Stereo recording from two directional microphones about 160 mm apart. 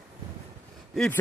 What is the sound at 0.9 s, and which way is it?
Speech, 5° left (ahead or behind).